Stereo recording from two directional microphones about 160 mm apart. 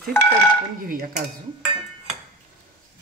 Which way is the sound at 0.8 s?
60° right (ahead or behind).